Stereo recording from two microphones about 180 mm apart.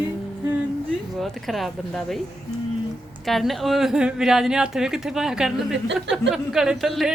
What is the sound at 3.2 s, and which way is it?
A woman's voice, centre (ahead or behind).